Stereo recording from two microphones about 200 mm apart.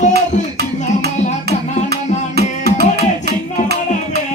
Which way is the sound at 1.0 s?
50° right (ahead or behind).